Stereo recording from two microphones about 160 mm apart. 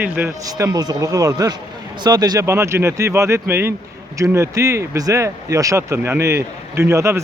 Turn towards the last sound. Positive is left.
turn(degrees=-15)  # may be behind; listen again after turning